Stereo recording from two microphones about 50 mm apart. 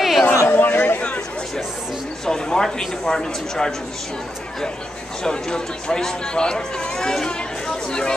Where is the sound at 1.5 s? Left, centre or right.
Centre.